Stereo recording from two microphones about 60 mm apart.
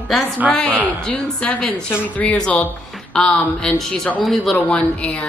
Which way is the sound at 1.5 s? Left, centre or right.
Centre.